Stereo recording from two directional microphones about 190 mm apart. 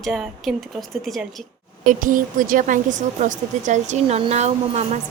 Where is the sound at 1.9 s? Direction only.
45° right (ahead or behind).